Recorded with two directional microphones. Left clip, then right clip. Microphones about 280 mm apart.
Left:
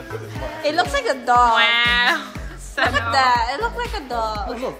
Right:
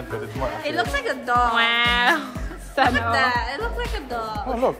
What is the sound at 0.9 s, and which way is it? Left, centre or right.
Speech, centre.